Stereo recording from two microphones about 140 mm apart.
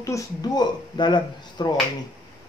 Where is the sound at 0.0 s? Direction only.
25° left (ahead or behind).